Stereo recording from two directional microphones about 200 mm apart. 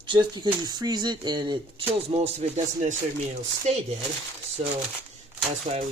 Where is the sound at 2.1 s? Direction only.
35° right (ahead or behind).